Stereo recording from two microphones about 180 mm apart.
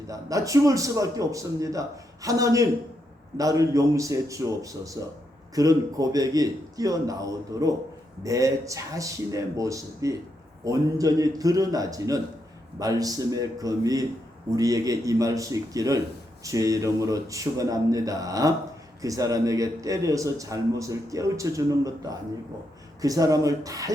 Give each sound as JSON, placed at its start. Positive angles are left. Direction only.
{"t": 0.1, "sound": "a man's voice", "side_deg": -20}